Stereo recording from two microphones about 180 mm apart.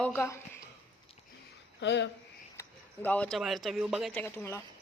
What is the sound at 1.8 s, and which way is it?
Speech, 75° left (ahead or behind).